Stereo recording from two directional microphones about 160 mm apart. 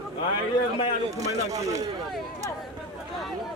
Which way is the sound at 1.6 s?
20° right (ahead or behind).